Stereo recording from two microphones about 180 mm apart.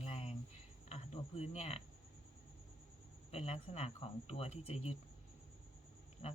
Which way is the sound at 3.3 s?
35° left (ahead or behind).